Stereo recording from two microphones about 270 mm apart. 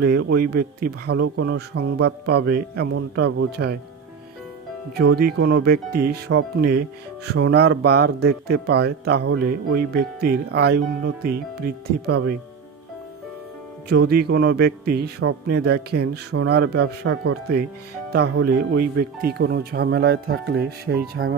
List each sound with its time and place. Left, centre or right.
0.0 s speech: right
3.6 s speech: right
4.9 s speech: right
13.8 s speech: right
17.0 s speech: right
18.1 s speech: right